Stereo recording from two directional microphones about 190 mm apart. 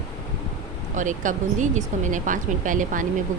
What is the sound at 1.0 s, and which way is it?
A woman's voice, 40° right (ahead or behind).